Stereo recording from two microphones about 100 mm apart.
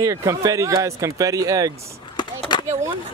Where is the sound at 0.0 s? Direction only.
35° right (ahead or behind).